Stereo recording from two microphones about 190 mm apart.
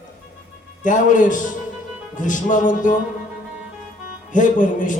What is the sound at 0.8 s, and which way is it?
A man's voice, 40° left (ahead or behind).